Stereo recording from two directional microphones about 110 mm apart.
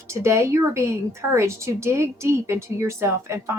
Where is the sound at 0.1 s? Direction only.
25° right (ahead or behind).